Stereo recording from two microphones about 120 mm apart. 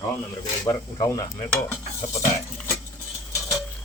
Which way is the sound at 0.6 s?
30° left (ahead or behind).